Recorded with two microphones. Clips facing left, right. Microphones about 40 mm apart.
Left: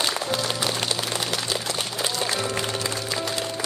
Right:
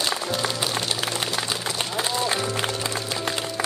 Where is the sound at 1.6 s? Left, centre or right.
Right.